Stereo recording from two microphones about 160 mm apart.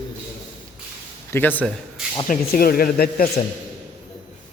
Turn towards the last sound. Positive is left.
turn(degrees=70)  # may be behind; listen again after turning